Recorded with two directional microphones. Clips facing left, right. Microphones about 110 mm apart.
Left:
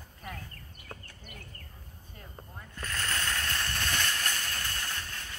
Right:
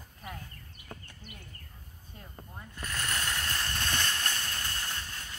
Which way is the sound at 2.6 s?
15° right (ahead or behind).